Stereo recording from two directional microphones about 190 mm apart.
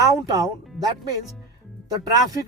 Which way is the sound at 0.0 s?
20° right (ahead or behind).